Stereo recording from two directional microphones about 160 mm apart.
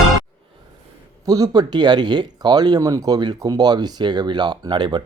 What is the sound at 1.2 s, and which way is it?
Speech, 20° right (ahead or behind).